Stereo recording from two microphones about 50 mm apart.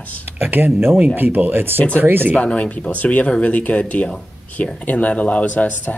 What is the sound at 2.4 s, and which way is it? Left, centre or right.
Speech, left.